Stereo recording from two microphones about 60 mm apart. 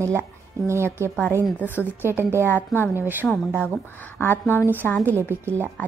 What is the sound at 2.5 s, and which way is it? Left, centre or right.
Speech, left.